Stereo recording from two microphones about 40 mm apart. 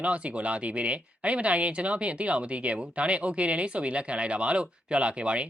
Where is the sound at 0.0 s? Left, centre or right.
Right.